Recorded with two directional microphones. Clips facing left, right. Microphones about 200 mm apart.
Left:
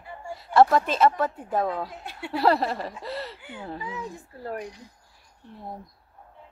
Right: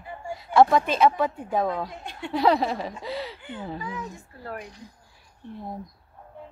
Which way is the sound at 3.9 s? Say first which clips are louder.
Left 1 dB; 35° left (ahead or behind).